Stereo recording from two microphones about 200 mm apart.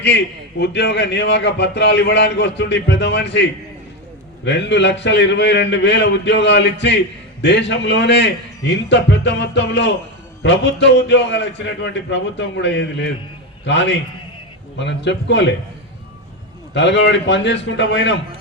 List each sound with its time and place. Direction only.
0.6 s a man's voice: 60° left (ahead or behind)
4.4 s a man's voice: 60° left (ahead or behind)
16.7 s a man's voice: 60° left (ahead or behind)